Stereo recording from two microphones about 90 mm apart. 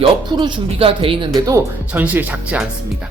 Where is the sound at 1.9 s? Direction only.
20° right (ahead or behind).